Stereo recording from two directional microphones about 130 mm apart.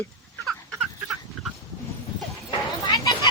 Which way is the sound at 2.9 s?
30° left (ahead or behind).